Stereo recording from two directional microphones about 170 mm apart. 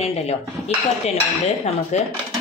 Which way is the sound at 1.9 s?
40° left (ahead or behind).